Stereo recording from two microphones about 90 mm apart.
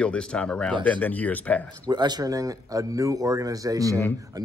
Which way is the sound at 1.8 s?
50° right (ahead or behind).